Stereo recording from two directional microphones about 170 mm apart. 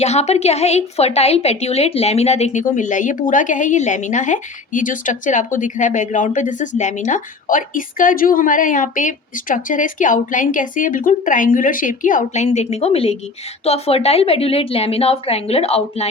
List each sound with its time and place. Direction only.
0.0 s a woman's voice: 40° left (ahead or behind)